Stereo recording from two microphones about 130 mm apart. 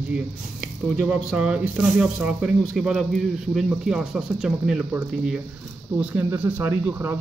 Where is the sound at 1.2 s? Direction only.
10° right (ahead or behind).